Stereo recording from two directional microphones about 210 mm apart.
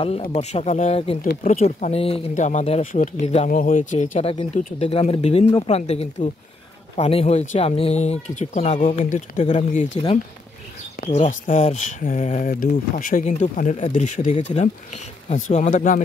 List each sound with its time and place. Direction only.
0.0 s speech: 30° left (ahead or behind)
1.2 s speech: 40° left (ahead or behind)
11.1 s speech: 35° left (ahead or behind)